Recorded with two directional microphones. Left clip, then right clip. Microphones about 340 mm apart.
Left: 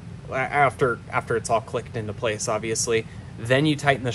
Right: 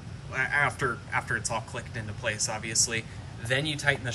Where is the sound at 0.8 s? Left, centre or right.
Centre.